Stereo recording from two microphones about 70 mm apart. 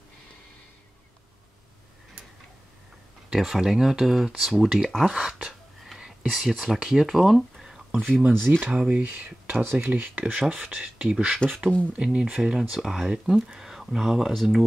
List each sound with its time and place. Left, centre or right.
3.3 s speech: centre
8.1 s speech: right; by 14.6 s centre